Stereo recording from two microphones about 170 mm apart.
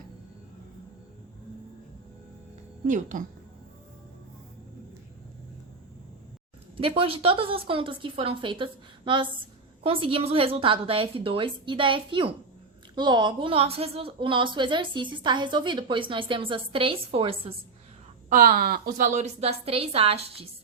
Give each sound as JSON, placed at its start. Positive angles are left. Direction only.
{"t": 2.8, "sound": "speech", "side_deg": -50}
{"t": 6.7, "sound": "a woman's voice", "side_deg": -30}
{"t": 18.3, "sound": "a woman's voice", "side_deg": -55}